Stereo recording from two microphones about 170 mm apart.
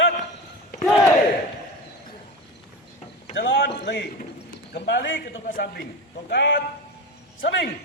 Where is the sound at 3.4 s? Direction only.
90° left.